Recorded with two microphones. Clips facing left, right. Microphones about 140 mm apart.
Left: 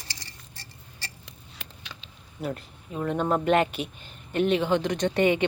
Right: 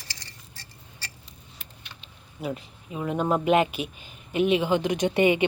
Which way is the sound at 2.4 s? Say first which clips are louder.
Even; 5° right (ahead or behind).